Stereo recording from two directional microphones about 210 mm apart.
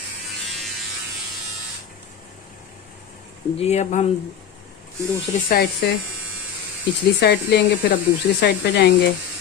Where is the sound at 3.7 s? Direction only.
30° left (ahead or behind).